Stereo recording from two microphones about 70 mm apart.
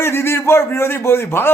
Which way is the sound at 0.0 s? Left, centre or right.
Left.